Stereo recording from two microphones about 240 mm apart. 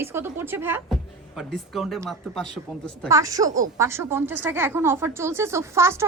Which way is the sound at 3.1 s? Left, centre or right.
Centre.